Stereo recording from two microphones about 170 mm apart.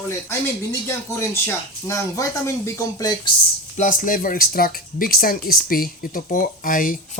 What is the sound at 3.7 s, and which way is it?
Speech, 50° left (ahead or behind).